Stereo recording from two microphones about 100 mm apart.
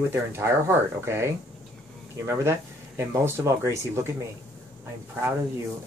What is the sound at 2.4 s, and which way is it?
Speech, 25° right (ahead or behind).